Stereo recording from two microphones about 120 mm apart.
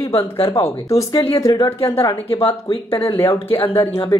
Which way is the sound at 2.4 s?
50° left (ahead or behind).